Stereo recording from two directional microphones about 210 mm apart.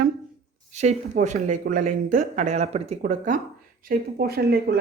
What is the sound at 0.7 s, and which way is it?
Speech, 35° right (ahead or behind).